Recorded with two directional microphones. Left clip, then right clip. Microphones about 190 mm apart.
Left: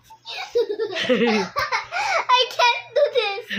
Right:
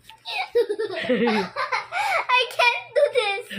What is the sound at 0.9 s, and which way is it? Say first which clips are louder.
Speech: left 2 dB; 15° left (ahead or behind).